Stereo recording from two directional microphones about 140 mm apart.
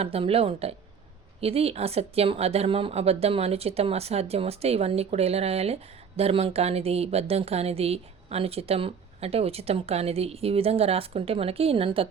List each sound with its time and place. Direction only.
0.0 s speech: 45° right (ahead or behind)